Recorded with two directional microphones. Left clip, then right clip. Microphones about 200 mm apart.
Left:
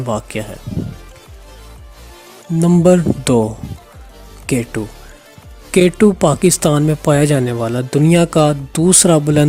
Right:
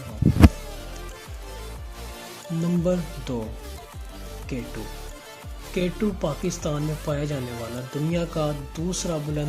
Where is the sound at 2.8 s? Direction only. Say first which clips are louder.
Left 15 dB; 55° left (ahead or behind).